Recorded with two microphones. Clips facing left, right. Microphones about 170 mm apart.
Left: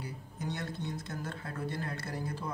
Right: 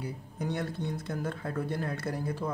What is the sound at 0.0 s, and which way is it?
A man's voice, 60° right (ahead or behind).